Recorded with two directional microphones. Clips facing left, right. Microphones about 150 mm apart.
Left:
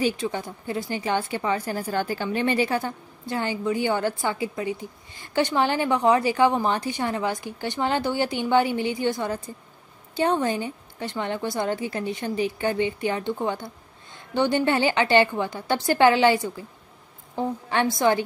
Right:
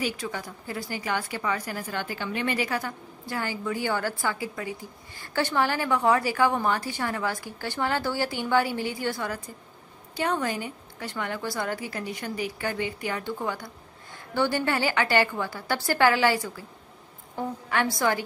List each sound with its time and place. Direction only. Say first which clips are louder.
0.0 s a woman's voice: left 6 dB; 25° left (ahead or behind)